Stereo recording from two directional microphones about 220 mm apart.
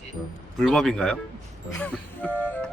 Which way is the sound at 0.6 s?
Centre (ahead or behind).